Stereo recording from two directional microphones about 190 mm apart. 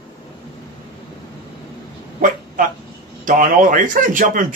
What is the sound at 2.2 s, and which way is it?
A man's voice, 50° right (ahead or behind).